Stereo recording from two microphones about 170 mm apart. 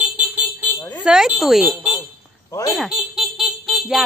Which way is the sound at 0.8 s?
25° left (ahead or behind).